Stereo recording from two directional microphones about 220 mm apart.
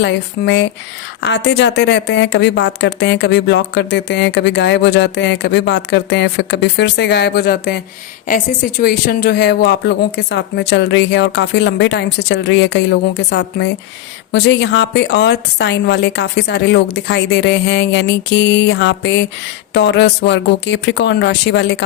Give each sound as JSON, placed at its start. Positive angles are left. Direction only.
{"t": 0.0, "sound": "speech", "side_deg": 55}
{"t": 8.8, "sound": "speech", "side_deg": 40}